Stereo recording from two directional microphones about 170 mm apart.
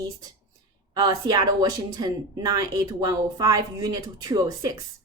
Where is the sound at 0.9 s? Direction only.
20° right (ahead or behind).